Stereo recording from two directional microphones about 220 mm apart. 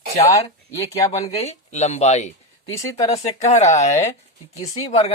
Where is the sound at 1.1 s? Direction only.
30° left (ahead or behind).